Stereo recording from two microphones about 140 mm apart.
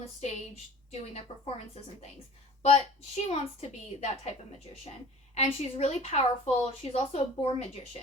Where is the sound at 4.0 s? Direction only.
50° left (ahead or behind).